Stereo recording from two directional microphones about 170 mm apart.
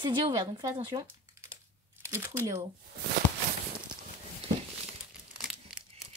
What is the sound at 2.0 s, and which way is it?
Speech, 15° right (ahead or behind).